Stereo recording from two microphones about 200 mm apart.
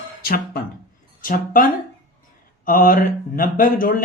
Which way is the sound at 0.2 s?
50° left (ahead or behind).